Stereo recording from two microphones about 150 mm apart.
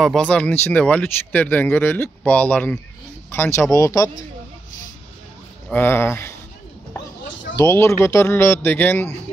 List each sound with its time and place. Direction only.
0.0 s speech: 5° left (ahead or behind); by 4.1 s 20° left (ahead or behind)
5.7 s speech: 15° left (ahead or behind)
7.5 s speech: 20° left (ahead or behind)